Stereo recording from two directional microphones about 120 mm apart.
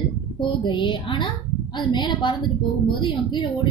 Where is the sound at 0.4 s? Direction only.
40° left (ahead or behind).